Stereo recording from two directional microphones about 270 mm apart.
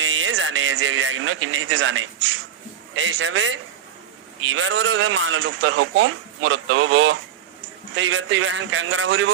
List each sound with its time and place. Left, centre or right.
0.0 s speech: right